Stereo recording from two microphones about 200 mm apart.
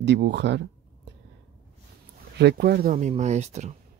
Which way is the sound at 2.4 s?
55° right (ahead or behind).